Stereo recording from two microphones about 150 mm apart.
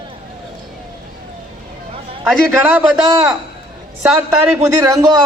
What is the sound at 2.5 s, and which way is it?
Speech, 15° right (ahead or behind).